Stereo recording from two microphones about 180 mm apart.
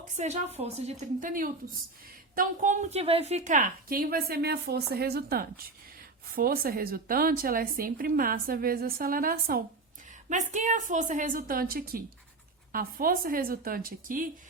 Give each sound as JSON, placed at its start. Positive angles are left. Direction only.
{"t": 0.2, "sound": "a woman's voice", "side_deg": -35}
{"t": 10.2, "sound": "a woman's voice", "side_deg": -45}